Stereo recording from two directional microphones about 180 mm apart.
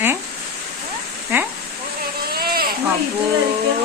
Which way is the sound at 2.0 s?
55° right (ahead or behind).